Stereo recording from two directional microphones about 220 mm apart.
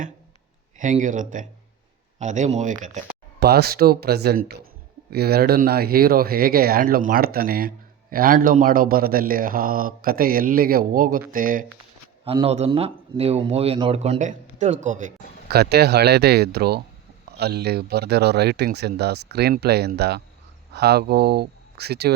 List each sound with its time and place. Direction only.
0.8 s a man's voice: 35° right (ahead or behind)
3.4 s a man's voice: 45° right (ahead or behind)
12.2 s a man's voice: 25° right (ahead or behind); by 22.1 s 45° right (ahead or behind)